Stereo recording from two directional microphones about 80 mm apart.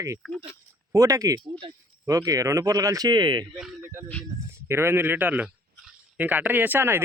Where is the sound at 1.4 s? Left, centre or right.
Right.